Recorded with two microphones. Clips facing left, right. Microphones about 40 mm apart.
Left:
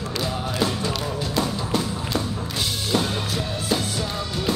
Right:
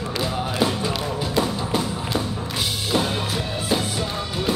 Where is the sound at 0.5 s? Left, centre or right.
Centre.